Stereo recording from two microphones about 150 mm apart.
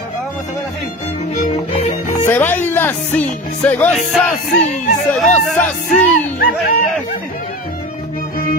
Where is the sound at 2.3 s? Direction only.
15° left (ahead or behind).